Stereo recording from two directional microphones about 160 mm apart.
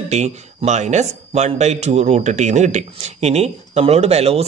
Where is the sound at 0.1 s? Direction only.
45° right (ahead or behind).